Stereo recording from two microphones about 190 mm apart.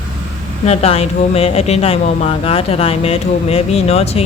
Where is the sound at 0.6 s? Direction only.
35° left (ahead or behind).